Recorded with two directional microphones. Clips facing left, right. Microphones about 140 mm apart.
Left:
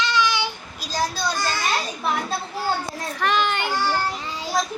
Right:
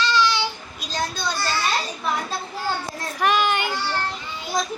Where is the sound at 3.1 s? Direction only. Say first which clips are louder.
Right 2 dB; 10° right (ahead or behind).